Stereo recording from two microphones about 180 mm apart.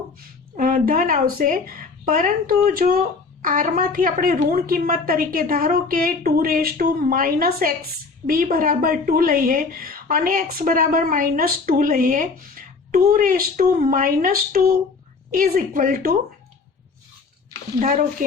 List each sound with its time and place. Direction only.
0.5 s a woman's voice: 50° right (ahead or behind)
17.7 s a woman's voice: 50° right (ahead or behind)